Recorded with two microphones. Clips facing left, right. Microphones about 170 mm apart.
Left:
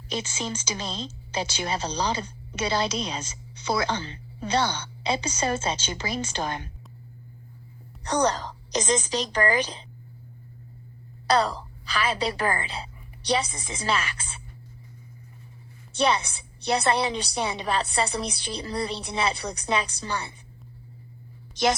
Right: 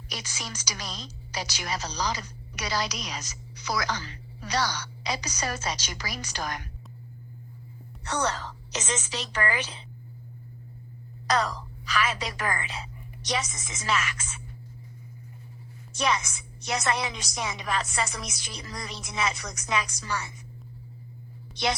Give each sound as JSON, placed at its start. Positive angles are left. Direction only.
{"t": 0.1, "sound": "a woman's voice", "side_deg": 25}
{"t": 8.0, "sound": "a woman's voice", "side_deg": 35}
{"t": 11.3, "sound": "a woman's voice", "side_deg": 30}
{"t": 15.9, "sound": "a woman's voice", "side_deg": 30}
{"t": 21.5, "sound": "a woman's voice", "side_deg": 45}